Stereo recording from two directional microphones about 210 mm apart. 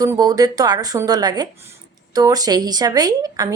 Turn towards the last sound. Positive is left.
turn(degrees=-15)  # may be behind; listen again after turning